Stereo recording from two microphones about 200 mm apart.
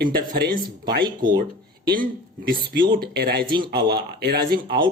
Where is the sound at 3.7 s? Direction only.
55° right (ahead or behind).